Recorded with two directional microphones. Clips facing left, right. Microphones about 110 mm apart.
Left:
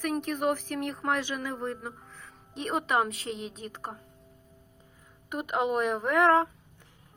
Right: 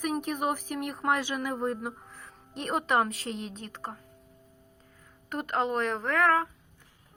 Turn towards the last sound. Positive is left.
turn(degrees=20)  # may be behind; listen again after turning